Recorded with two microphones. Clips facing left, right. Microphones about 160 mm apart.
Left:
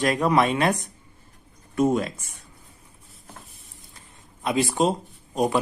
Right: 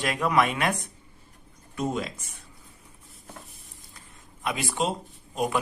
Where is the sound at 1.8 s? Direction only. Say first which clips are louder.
Left 8 dB; 45° left (ahead or behind).